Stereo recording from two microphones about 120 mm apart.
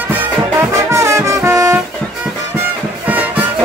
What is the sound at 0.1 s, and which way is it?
Music, 25° right (ahead or behind).